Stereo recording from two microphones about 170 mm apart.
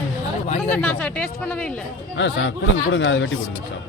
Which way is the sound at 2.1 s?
90° left.